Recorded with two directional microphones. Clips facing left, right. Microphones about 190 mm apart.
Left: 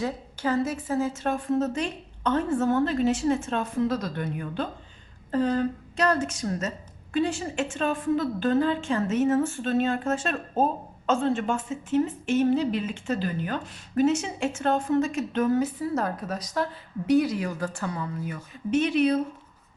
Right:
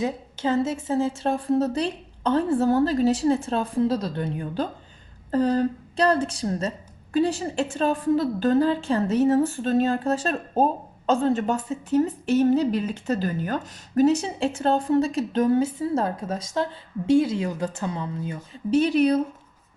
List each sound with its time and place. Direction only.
0.0 s a woman's voice: 25° right (ahead or behind); by 19.2 s 40° right (ahead or behind)